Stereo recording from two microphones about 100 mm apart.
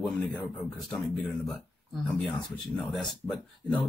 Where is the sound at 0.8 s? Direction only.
Centre (ahead or behind).